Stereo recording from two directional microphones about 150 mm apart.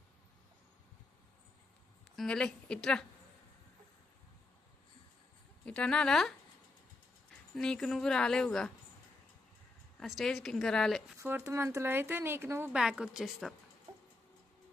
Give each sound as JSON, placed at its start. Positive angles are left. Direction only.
{"t": 2.1, "sound": "a woman's voice", "side_deg": 5}
{"t": 5.6, "sound": "speech", "side_deg": 5}
{"t": 7.5, "sound": "speech", "side_deg": 5}
{"t": 10.0, "sound": "speech", "side_deg": 0}
{"t": 11.2, "sound": "a woman's voice", "side_deg": -15}
{"t": 12.7, "sound": "speech", "side_deg": -5}